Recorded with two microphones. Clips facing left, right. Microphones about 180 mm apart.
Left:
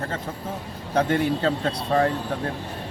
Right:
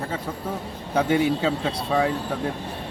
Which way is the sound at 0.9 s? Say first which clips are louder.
Right 1 dB; 10° right (ahead or behind).